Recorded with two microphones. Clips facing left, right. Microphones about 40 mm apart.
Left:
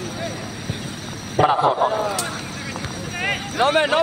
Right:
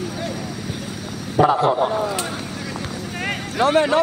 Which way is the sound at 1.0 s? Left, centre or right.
Left.